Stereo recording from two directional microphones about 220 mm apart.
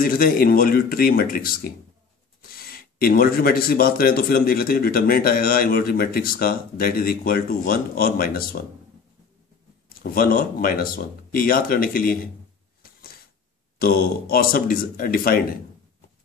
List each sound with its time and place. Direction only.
0.0 s speech: 40° left (ahead or behind)
10.0 s speech: 40° left (ahead or behind)
12.8 s a sound: 40° left (ahead or behind)
13.7 s speech: 45° left (ahead or behind)